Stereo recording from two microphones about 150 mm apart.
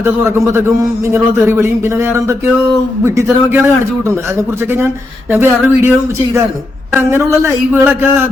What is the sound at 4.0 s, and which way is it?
Speech, 20° right (ahead or behind).